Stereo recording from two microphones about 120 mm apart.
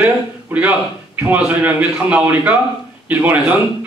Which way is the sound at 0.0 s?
15° right (ahead or behind).